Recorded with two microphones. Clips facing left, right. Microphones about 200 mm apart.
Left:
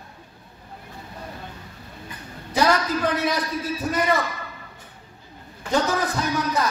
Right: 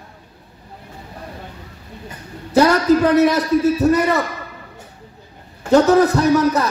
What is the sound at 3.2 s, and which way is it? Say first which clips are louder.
Speech: right 11 dB; 70° right (ahead or behind).